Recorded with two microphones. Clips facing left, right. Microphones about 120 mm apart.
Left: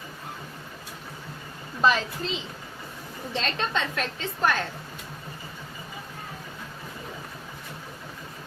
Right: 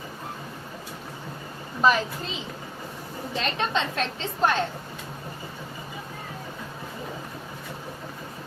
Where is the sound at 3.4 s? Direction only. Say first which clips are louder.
Right 2 dB; 20° right (ahead or behind).